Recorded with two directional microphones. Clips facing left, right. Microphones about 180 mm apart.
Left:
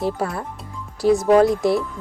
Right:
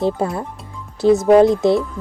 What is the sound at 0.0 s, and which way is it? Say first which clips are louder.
Speech: right 4 dB; 20° right (ahead or behind).